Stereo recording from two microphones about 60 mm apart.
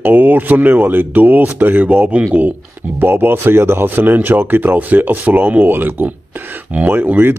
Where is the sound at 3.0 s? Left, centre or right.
Right.